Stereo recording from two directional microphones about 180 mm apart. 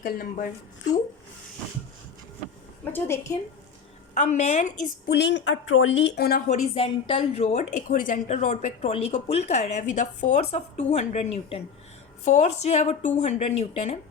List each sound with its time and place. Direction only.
0.0 s speech: 50° left (ahead or behind)
2.9 s a woman's voice: 15° left (ahead or behind)
4.1 s a woman's voice: 40° left (ahead or behind)
5.0 s a woman's voice: 65° left (ahead or behind)
6.5 s a woman's voice: 30° left (ahead or behind)